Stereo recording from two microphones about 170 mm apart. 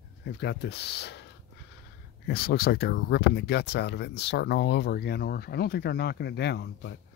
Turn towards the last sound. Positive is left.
turn(degrees=85)